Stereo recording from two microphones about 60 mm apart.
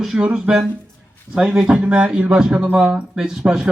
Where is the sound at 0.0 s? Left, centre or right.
Centre.